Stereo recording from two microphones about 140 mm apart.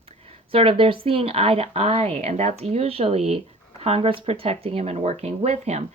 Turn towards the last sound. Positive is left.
turn(degrees=-50)  # may be behind; listen again after turning